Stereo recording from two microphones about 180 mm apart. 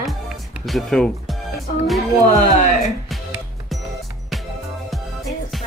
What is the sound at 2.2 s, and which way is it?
Speech, 45° left (ahead or behind).